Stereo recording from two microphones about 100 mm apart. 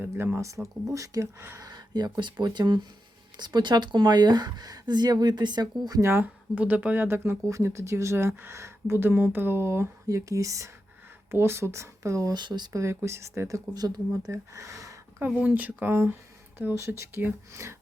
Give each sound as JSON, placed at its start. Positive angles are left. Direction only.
{"t": 0.0, "sound": "speech", "side_deg": -25}
{"t": 1.6, "sound": "speech", "side_deg": -45}
{"t": 6.0, "sound": "speech", "side_deg": -25}
{"t": 12.3, "sound": "speech", "side_deg": -45}
{"t": 12.8, "sound": "speech", "side_deg": -25}
{"t": 13.7, "sound": "speech", "side_deg": -40}
{"t": 15.3, "sound": "speech", "side_deg": -15}